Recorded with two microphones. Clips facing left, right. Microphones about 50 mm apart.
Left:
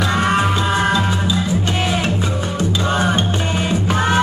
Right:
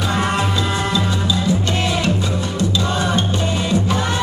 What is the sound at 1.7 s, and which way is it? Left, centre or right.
Music, left.